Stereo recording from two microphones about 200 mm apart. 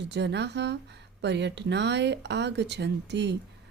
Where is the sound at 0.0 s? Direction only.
60° right (ahead or behind).